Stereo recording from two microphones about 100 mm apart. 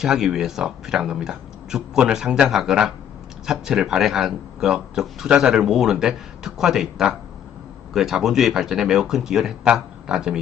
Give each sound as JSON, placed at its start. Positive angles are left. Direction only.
{"t": 0.0, "sound": "speech", "side_deg": -5}